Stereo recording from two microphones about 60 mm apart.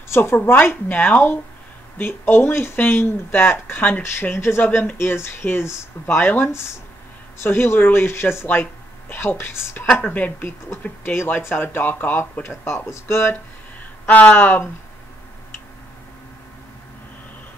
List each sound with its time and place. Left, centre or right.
0.1 s speech: left
10.0 s speech: left
14.0 s speech: left